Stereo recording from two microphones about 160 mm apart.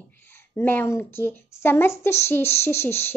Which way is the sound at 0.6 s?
15° left (ahead or behind).